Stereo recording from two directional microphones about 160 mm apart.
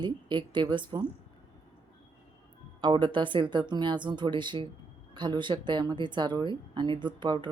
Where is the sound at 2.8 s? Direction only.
30° right (ahead or behind).